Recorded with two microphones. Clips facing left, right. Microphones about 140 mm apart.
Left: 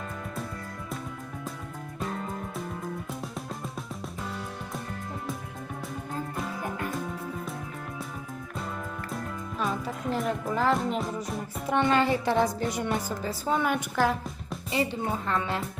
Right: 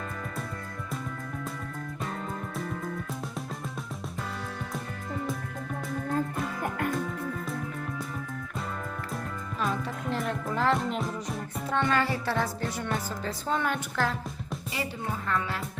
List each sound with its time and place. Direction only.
9.1 s music: centre (ahead or behind)
11.7 s music: 20° left (ahead or behind)
14.7 s speech: 25° left (ahead or behind)